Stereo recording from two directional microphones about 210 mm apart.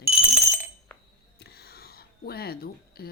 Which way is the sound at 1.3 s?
50° left (ahead or behind).